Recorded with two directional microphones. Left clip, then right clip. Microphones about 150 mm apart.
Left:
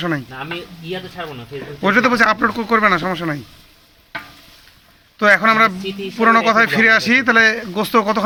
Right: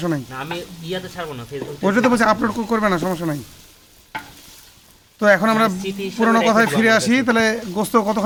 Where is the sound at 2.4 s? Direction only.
10° right (ahead or behind).